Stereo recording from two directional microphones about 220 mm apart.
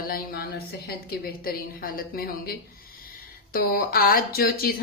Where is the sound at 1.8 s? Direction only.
40° left (ahead or behind).